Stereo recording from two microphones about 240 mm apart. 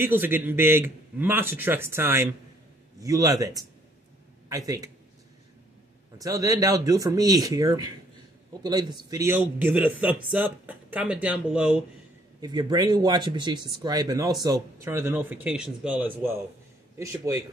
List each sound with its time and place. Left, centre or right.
0.0 s speech: centre
6.1 s speech: centre
12.4 s speech: centre